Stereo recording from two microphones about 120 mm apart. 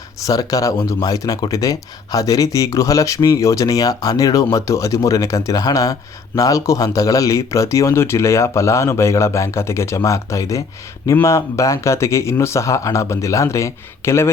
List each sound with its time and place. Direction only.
0.3 s speech: 30° left (ahead or behind)